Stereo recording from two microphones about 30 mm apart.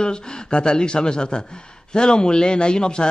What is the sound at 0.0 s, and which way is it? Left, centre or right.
A man's voice, left.